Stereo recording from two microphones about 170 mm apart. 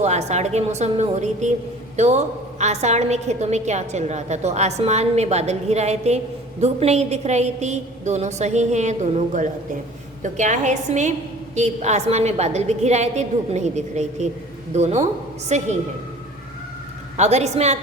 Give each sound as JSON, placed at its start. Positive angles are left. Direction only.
{"t": 0.0, "sound": "a woman's voice", "side_deg": -40}
{"t": 17.2, "sound": "a woman's voice", "side_deg": -40}